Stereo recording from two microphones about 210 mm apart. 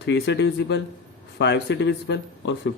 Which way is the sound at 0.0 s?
55° left (ahead or behind).